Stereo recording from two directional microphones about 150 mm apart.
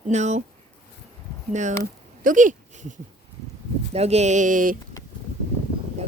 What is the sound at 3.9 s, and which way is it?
Speech, 45° right (ahead or behind).